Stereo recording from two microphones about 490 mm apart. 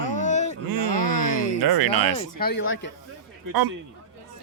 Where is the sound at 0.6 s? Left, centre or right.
Right.